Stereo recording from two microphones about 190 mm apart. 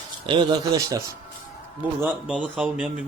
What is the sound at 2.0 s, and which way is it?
Speech, 5° right (ahead or behind).